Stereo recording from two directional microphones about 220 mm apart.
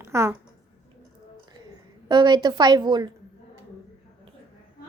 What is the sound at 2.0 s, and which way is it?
A woman's voice, 20° right (ahead or behind).